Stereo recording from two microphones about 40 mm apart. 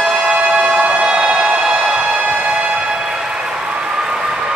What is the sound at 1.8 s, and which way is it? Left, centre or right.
Train, right.